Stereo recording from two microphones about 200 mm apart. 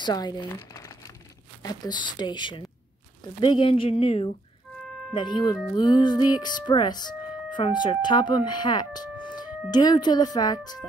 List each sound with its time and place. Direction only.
0.0 s crumpling: 20° left (ahead or behind)
1.6 s speech: 20° left (ahead or behind)